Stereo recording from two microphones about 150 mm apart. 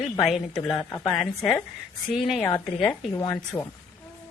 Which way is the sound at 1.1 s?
Centre (ahead or behind).